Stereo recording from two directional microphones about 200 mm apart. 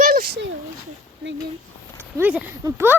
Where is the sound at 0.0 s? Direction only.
45° right (ahead or behind).